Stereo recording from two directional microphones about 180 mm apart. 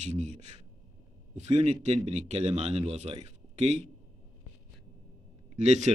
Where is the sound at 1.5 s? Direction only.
35° right (ahead or behind).